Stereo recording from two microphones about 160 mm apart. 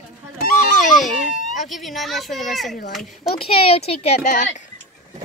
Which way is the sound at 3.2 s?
35° left (ahead or behind).